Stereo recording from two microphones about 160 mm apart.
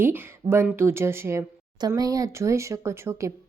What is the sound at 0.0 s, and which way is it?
Speech, 15° right (ahead or behind).